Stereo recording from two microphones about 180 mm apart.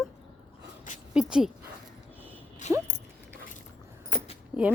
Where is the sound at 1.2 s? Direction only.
5° right (ahead or behind).